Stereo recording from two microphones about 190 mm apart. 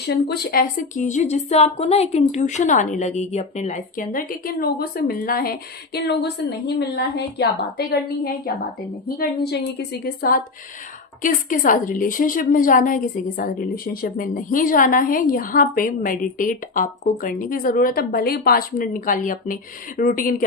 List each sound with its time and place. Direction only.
0.1 s a woman's voice: 55° left (ahead or behind)
7.6 s a woman's voice: 50° left (ahead or behind)